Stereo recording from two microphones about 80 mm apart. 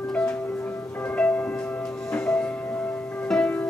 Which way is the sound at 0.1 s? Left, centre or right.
Centre.